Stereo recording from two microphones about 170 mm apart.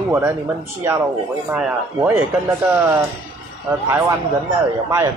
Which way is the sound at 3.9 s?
15° right (ahead or behind).